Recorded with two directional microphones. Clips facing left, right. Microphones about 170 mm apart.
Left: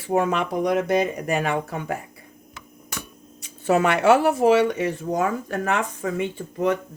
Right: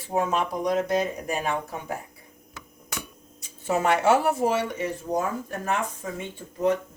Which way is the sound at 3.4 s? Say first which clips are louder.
Left 5 dB; 70° left (ahead or behind).